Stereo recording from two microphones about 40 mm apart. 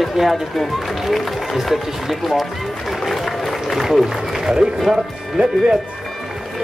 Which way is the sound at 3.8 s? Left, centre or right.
Centre.